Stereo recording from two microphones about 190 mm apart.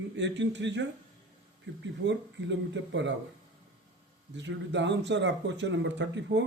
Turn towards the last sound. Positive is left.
turn(degrees=-70)  # may be behind; listen again after turning